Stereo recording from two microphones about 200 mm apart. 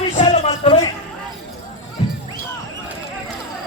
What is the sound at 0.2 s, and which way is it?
Music, 30° left (ahead or behind).